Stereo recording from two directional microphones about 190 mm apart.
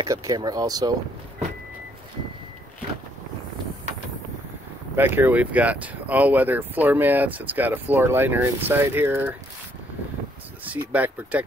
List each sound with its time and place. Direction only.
0.0 s speech: 20° right (ahead or behind)
4.9 s speech: 10° right (ahead or behind)
10.6 s speech: 10° right (ahead or behind)